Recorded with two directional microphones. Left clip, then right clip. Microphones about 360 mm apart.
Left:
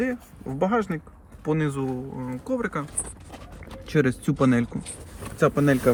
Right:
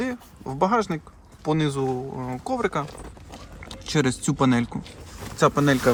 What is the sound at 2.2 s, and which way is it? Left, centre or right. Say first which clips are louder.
Speech: right 1 dB; centre.